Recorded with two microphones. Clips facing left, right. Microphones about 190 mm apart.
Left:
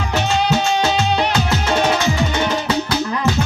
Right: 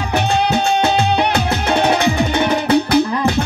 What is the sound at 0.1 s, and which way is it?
Music, 60° right (ahead or behind).